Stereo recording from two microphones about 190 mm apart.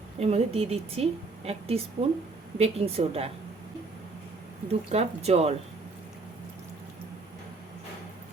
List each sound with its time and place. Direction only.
0.2 s a woman's voice: 35° right (ahead or behind)
4.7 s a woman's voice: 35° right (ahead or behind)